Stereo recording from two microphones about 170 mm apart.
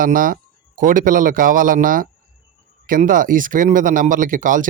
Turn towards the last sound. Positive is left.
turn(degrees=-50)  # may be behind; listen again after turning